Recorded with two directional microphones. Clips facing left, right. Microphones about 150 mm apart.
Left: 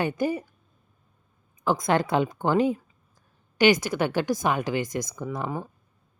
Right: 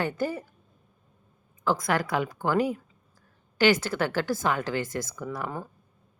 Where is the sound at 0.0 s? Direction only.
15° left (ahead or behind).